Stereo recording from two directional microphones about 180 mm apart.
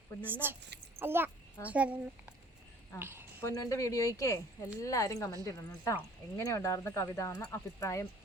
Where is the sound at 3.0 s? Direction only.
10° right (ahead or behind).